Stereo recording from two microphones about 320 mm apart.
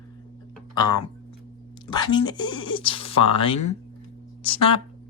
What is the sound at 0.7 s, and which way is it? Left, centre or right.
Speech, centre.